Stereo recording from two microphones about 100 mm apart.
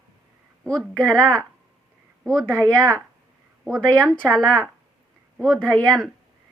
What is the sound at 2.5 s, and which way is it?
Speech, 25° right (ahead or behind).